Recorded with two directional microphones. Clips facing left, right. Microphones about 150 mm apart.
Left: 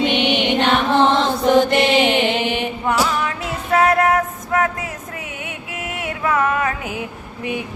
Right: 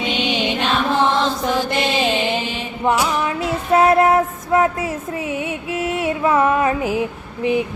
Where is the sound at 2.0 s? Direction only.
65° left (ahead or behind).